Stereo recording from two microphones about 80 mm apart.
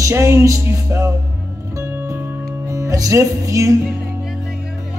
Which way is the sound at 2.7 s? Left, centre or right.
Right.